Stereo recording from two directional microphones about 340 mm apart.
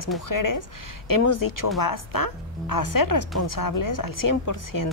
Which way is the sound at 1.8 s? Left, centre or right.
Left.